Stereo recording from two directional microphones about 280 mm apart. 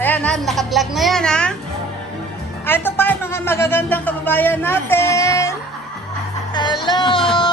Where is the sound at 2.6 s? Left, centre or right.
Centre.